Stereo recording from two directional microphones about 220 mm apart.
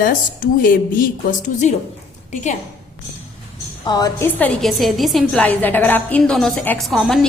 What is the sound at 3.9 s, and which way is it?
A woman's voice, 15° left (ahead or behind).